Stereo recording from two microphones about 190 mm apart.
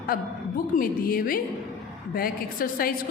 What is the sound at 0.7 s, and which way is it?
A woman's voice, 50° left (ahead or behind).